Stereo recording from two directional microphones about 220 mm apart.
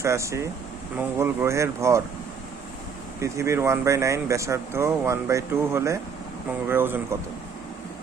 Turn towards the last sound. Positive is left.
turn(degrees=-10)  # may be behind; listen again after turning